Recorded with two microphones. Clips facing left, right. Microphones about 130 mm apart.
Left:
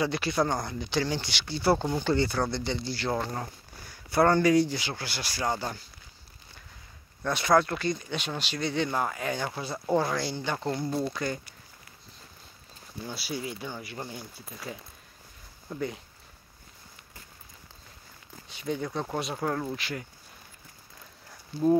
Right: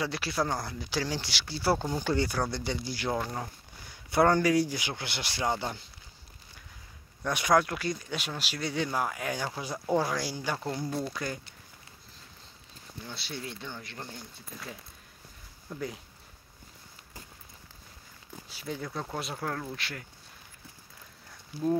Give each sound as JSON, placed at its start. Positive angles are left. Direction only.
{"t": 0.0, "sound": "speech", "side_deg": -5}
{"t": 4.3, "sound": "speech", "side_deg": -10}
{"t": 7.2, "sound": "speech", "side_deg": -15}
{"t": 13.0, "sound": "speech", "side_deg": 5}
{"t": 18.5, "sound": "speech", "side_deg": -5}
{"t": 19.3, "sound": "speech", "side_deg": 10}